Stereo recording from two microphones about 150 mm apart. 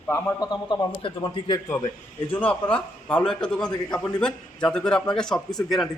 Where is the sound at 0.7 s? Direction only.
30° left (ahead or behind).